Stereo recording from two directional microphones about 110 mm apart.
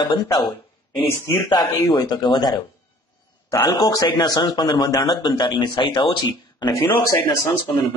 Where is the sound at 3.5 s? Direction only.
30° left (ahead or behind).